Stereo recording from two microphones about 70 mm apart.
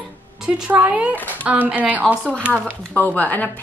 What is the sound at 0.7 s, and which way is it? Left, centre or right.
Speech, right.